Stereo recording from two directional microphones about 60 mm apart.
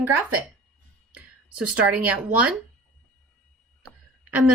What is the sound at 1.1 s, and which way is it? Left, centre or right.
Speech, centre.